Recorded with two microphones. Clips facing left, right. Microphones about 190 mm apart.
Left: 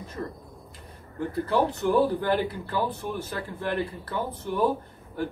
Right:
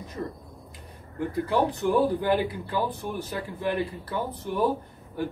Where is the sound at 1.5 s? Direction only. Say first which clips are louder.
Left 1 dB; 15° right (ahead or behind).